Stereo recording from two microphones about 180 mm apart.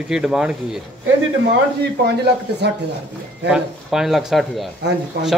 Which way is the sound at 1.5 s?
65° right (ahead or behind).